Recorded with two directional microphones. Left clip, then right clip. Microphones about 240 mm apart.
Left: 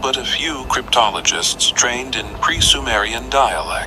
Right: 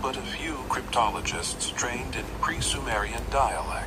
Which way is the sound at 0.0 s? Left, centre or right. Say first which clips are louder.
Left 12 dB; left.